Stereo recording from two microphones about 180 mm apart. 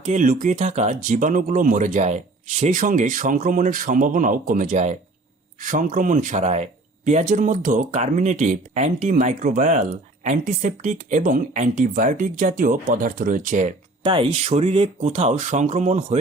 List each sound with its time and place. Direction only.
0.0 s speech: 45° right (ahead or behind)
14.0 s speech: 30° right (ahead or behind)